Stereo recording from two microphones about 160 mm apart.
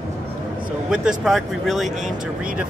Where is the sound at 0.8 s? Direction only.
5° right (ahead or behind).